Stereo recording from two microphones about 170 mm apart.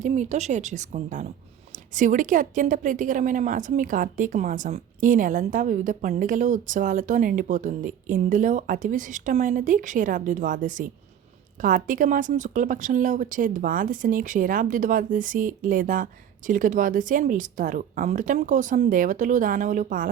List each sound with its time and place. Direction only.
0.0 s a woman's voice: 45° right (ahead or behind)